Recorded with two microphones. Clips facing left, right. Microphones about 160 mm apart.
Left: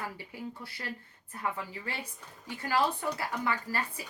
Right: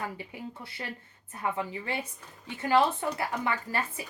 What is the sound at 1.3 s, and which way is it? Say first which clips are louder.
Speech: right 4 dB; 20° right (ahead or behind).